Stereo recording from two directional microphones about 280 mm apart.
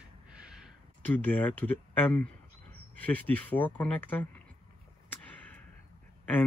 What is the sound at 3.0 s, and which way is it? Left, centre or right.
Speech, centre.